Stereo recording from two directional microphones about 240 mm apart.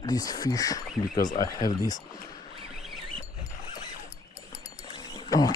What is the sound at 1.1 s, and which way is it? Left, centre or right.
Speech, left.